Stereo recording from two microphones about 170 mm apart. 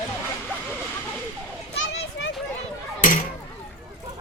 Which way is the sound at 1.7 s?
90° left.